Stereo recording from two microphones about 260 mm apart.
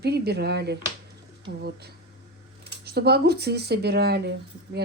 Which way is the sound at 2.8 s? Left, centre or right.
Right.